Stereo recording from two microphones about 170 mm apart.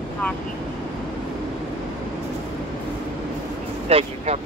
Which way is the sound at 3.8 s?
40° right (ahead or behind).